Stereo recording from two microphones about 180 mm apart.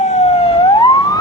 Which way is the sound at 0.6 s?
20° left (ahead or behind).